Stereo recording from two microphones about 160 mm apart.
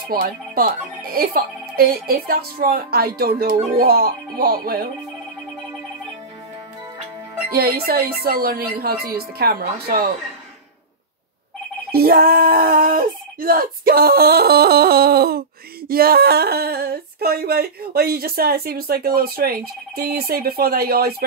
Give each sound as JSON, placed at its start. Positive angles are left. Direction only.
{"t": 0.1, "sound": "speech", "side_deg": -65}
{"t": 7.5, "sound": "speech", "side_deg": -70}
{"t": 11.9, "sound": "speech", "side_deg": -70}